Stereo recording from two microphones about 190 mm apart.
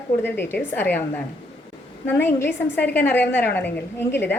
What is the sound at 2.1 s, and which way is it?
A woman's voice, 10° left (ahead or behind).